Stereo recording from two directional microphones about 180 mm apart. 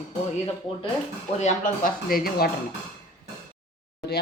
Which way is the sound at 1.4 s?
45° left (ahead or behind).